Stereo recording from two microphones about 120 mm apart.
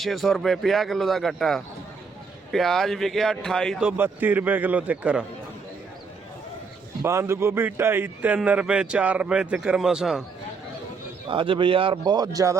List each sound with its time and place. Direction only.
0.0 s a man's voice: centre (ahead or behind)
3.8 s a man's voice: 15° right (ahead or behind)
7.0 s a man's voice: 20° right (ahead or behind); by 10.2 s 5° right (ahead or behind)
11.3 s a man's voice: 45° right (ahead or behind); by 12.5 s 30° right (ahead or behind)